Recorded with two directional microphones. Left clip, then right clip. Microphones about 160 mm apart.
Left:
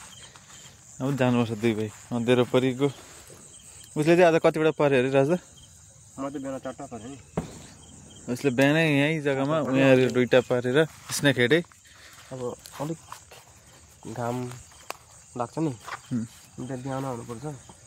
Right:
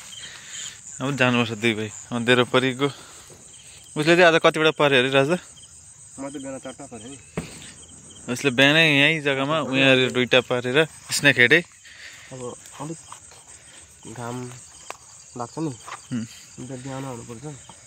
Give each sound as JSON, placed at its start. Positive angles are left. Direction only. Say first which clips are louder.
{"t": 0.9, "sound": "speech", "louder": "right 4 dB", "side_deg": 5}
{"t": 6.3, "sound": "cricket", "louder": "even", "side_deg": 20}
{"t": 7.0, "sound": "speech", "louder": "even", "side_deg": 30}
{"t": 8.3, "sound": "speech", "louder": "right 5 dB", "side_deg": 0}
{"t": 14.4, "sound": "cricket", "louder": "even", "side_deg": 0}
{"t": 15.7, "sound": "speech", "louder": "right 1 dB", "side_deg": -5}
{"t": 16.6, "sound": "speech", "louder": "left 2 dB", "side_deg": 10}
{"t": 17.0, "sound": "speech", "louder": "left 1 dB", "side_deg": 0}